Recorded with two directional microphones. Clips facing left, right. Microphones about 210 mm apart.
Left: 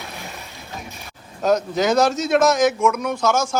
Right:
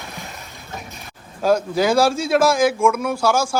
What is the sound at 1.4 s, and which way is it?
A man's voice, 5° right (ahead or behind).